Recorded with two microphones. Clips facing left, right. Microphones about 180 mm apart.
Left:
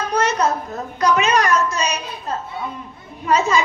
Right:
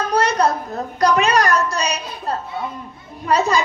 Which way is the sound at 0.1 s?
35° right (ahead or behind).